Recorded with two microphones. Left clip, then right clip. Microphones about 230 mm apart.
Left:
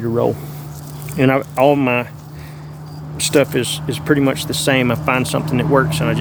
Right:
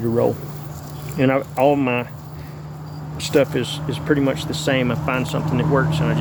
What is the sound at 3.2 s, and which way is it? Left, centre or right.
Speech, left.